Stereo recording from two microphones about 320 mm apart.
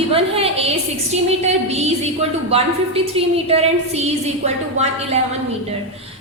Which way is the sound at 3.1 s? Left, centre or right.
Centre.